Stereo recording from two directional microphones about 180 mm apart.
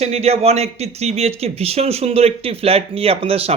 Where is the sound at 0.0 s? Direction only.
35° right (ahead or behind).